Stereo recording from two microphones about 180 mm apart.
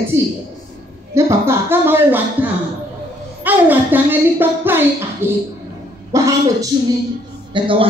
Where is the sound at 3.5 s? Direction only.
10° right (ahead or behind); by 7.8 s 30° right (ahead or behind).